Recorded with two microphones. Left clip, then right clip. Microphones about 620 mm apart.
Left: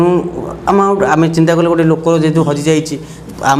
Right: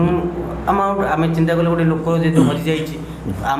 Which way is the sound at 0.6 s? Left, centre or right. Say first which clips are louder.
Left 6 dB; left.